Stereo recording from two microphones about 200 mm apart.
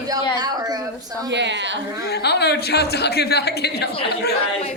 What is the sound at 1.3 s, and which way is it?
Speech, 60° right (ahead or behind).